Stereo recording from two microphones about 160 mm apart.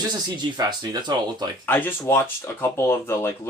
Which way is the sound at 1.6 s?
15° left (ahead or behind).